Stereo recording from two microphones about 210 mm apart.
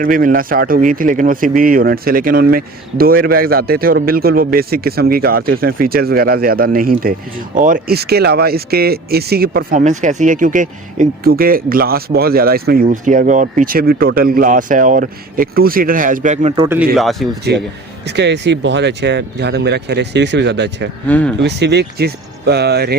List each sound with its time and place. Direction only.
0.0 s speech: 40° right (ahead or behind)
16.6 s speech: 5° right (ahead or behind)
17.5 s speech: 55° right (ahead or behind)
21.1 s speech: 5° left (ahead or behind)
21.4 s speech: 55° right (ahead or behind)